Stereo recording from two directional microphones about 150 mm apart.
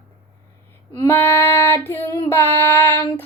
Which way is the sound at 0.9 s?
15° left (ahead or behind).